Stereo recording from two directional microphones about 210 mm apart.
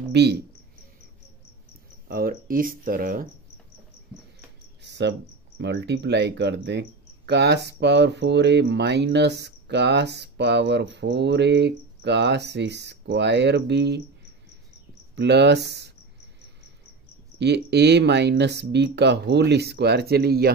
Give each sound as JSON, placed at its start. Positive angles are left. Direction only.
{"t": 0.1, "sound": "speech", "side_deg": -50}
{"t": 2.0, "sound": "speech", "side_deg": -45}
{"t": 4.8, "sound": "cricket", "side_deg": -55}
{"t": 5.6, "sound": "speech", "side_deg": -55}
{"t": 15.1, "sound": "speech", "side_deg": -55}
{"t": 17.4, "sound": "speech", "side_deg": -55}